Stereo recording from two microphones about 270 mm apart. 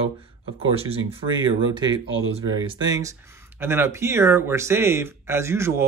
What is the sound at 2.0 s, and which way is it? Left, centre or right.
Speech, right.